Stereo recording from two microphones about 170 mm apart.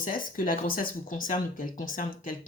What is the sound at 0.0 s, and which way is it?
Speech, 55° left (ahead or behind).